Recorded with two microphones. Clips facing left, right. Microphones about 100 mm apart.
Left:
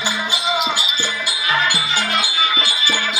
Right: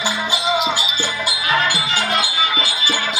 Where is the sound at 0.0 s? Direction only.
5° right (ahead or behind).